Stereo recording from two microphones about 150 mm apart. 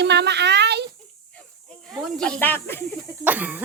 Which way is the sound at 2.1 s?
5° left (ahead or behind).